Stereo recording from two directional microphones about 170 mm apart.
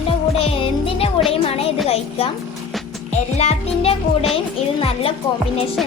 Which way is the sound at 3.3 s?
40° left (ahead or behind).